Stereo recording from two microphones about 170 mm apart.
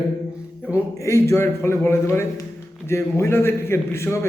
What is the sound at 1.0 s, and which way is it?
A man's voice, 15° left (ahead or behind).